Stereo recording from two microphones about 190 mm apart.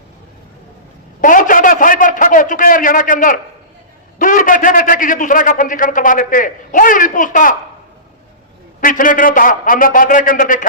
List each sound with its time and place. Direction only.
1.2 s a man's voice: 45° left (ahead or behind)
8.8 s a man's voice: 45° left (ahead or behind)